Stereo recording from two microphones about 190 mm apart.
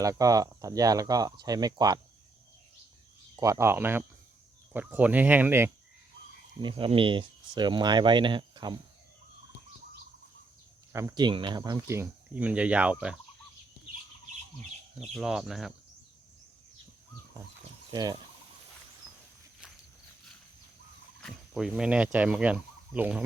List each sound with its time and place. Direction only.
0.0 s speech: 15° right (ahead or behind)
3.4 s speech: 15° right (ahead or behind)
6.6 s speech: 25° right (ahead or behind)
10.9 s speech: 20° right (ahead or behind)
15.0 s speech: centre (ahead or behind)
17.9 s speech: 20° right (ahead or behind)
21.2 s speech: centre (ahead or behind)